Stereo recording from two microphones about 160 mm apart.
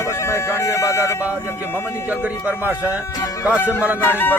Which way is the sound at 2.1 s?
10° right (ahead or behind).